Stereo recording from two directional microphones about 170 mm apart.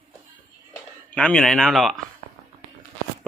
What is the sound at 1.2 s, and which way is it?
Speech, 5° left (ahead or behind).